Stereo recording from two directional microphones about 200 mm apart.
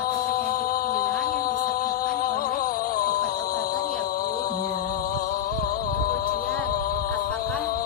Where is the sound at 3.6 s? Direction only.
50° left (ahead or behind).